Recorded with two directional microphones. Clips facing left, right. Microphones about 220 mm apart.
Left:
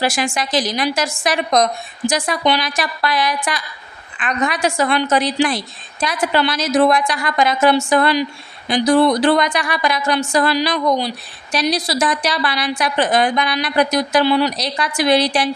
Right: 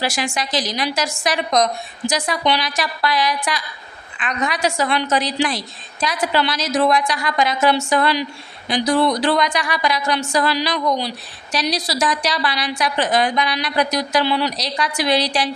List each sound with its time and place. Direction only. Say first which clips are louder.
0.0 s a woman's voice: left 3 dB; 50° left (ahead or behind)